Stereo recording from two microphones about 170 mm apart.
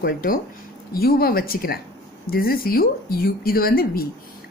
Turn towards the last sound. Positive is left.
turn(degrees=60)  # may be behind; listen again after turning